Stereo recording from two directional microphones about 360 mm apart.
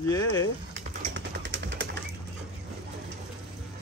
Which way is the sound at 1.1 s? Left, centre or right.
Right.